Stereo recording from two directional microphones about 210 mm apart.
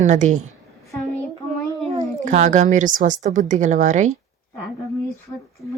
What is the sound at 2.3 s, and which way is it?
Speech, 35° right (ahead or behind).